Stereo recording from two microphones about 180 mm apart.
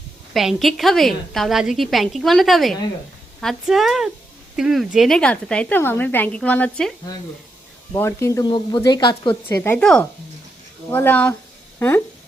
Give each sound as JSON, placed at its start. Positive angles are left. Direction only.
{"t": 0.3, "sound": "a woman's voice", "side_deg": 0}
{"t": 7.9, "sound": "a woman's voice", "side_deg": 15}
{"t": 9.5, "sound": "a woman's voice", "side_deg": 10}